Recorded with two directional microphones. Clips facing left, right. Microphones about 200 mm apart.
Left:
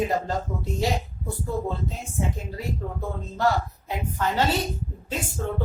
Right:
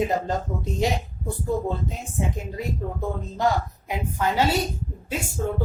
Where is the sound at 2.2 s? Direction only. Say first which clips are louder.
Right 1 dB; 15° right (ahead or behind).